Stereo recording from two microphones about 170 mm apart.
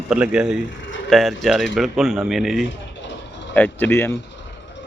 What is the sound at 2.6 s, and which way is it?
Vehicle, 90° left.